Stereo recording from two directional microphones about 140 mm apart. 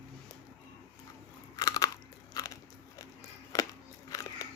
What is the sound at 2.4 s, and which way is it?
Biting, 25° left (ahead or behind).